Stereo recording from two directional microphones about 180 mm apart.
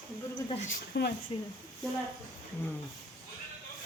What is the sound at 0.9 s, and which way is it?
Speech, 65° left (ahead or behind).